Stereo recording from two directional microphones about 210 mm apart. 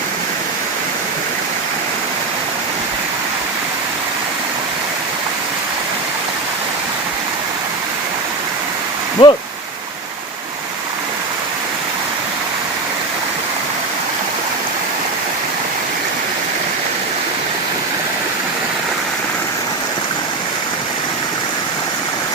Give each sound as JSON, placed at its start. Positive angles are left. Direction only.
{"t": 9.2, "sound": "speech", "side_deg": 30}